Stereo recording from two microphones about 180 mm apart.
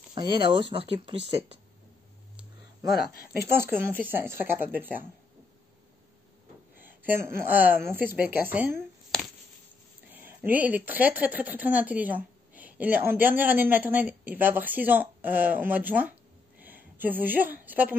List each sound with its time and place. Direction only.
0.4 s speech: 25° right (ahead or behind)
3.3 s speech: 15° right (ahead or behind)
6.8 s speech: 10° right (ahead or behind)
10.2 s speech: 10° right (ahead or behind)